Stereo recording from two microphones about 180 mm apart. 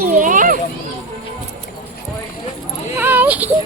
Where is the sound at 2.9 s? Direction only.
10° right (ahead or behind).